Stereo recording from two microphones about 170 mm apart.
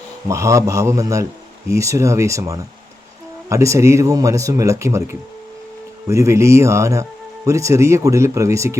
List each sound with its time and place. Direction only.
0.3 s speech: 15° right (ahead or behind)